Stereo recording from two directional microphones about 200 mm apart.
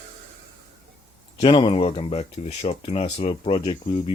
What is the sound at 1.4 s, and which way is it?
Speech, 25° left (ahead or behind).